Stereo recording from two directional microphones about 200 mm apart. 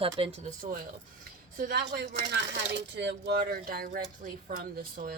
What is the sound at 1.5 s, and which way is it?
Speech, 50° right (ahead or behind).